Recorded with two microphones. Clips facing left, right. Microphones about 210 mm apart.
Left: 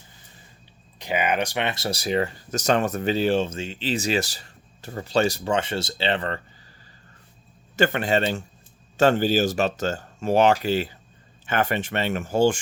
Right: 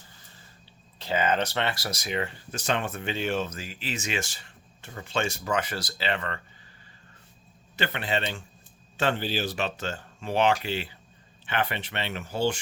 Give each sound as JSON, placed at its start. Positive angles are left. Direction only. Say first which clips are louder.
{"t": 0.9, "sound": "speech", "louder": "left 2 dB", "side_deg": 15}
{"t": 7.8, "sound": "speech", "louder": "left 8 dB", "side_deg": 45}